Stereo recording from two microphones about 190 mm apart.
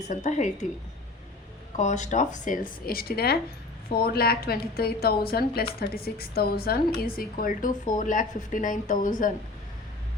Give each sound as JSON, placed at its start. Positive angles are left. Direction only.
{"t": 0.1, "sound": "a woman's voice", "side_deg": 35}
{"t": 1.7, "sound": "a woman's voice", "side_deg": 40}